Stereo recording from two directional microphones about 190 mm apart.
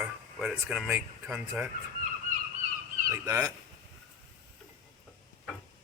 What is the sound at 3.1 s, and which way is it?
Speech, 15° right (ahead or behind).